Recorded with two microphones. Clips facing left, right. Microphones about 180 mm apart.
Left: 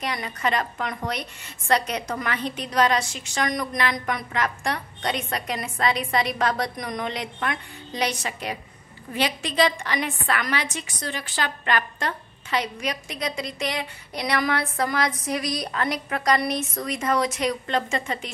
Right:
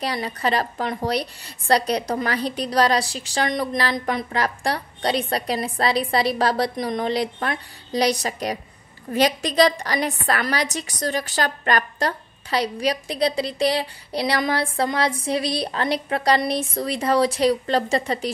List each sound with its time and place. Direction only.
0.0 s a woman's voice: 35° right (ahead or behind)